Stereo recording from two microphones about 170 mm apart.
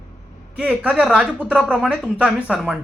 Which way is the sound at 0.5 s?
5° right (ahead or behind).